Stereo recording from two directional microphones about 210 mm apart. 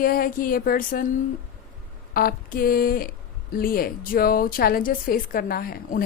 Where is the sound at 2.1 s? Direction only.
45° left (ahead or behind).